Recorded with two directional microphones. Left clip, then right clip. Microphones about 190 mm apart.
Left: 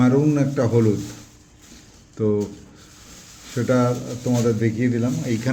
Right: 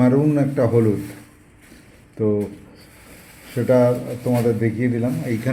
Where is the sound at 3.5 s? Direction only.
Centre (ahead or behind).